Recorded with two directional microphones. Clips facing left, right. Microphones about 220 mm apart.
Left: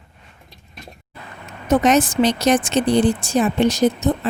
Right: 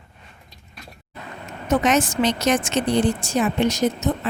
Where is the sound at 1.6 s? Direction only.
35° left (ahead or behind).